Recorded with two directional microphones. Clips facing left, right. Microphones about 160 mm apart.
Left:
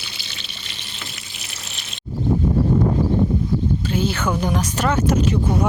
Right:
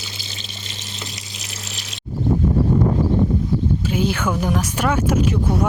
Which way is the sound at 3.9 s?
10° right (ahead or behind).